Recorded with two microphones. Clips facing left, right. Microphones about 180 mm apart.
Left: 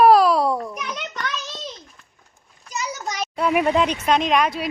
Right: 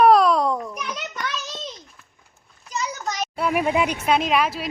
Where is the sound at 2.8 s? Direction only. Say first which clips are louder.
Right 1 dB; 10° left (ahead or behind).